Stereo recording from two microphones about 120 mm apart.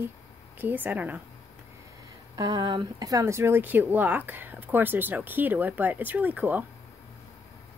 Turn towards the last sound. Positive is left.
turn(degrees=-15)  # may be behind; listen again after turning